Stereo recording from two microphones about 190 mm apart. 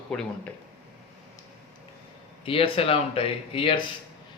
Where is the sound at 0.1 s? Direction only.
5° left (ahead or behind).